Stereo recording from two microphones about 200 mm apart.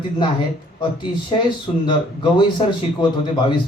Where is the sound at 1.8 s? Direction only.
25° left (ahead or behind).